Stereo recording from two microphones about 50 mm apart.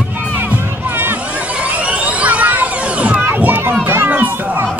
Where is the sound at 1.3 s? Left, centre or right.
Right.